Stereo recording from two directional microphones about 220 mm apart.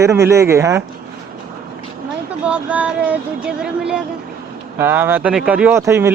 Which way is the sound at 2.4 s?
5° right (ahead or behind).